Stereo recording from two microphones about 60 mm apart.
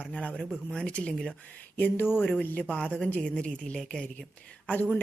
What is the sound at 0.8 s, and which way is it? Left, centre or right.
Speech, centre.